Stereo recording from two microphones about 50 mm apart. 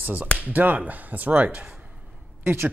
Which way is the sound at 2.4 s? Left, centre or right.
Right.